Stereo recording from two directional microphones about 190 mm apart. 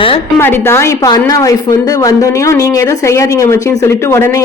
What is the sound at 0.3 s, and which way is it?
A woman's voice, 10° left (ahead or behind).